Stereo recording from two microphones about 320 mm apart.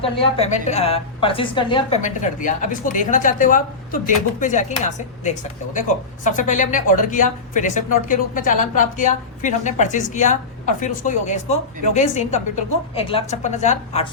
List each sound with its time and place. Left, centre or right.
0.0 s a woman's voice: centre